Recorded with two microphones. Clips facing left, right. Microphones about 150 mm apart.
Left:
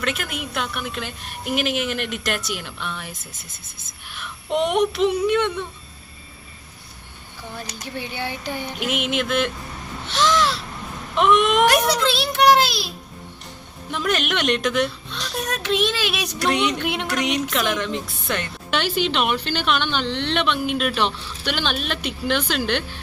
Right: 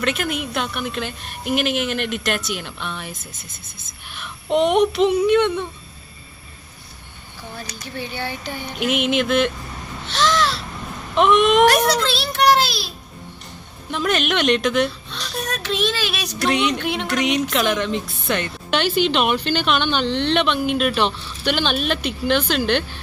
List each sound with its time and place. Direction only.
0.0 s a woman's voice: centre (ahead or behind)
4.5 s a woman's voice: centre (ahead or behind)
7.9 s speech: 15° left (ahead or behind)
8.8 s a woman's voice: 5° left (ahead or behind)
10.1 s a sound: 15° left (ahead or behind)
11.2 s a woman's voice: centre (ahead or behind)
11.7 s speech: 15° left (ahead or behind)
13.9 s a woman's voice: 5° left (ahead or behind)
15.1 s speech: 15° left (ahead or behind)
16.5 s a woman's voice: centre (ahead or behind)
16.9 s speech: 10° left (ahead or behind)
17.2 s a woman's voice: centre (ahead or behind)